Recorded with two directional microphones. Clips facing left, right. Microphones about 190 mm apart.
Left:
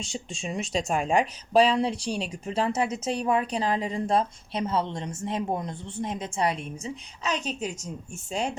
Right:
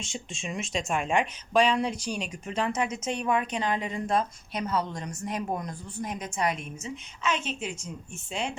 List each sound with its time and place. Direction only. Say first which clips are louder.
0.0 s speech: left 3 dB; 35° left (ahead or behind)